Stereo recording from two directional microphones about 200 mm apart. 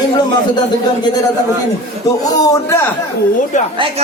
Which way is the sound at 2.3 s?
20° left (ahead or behind).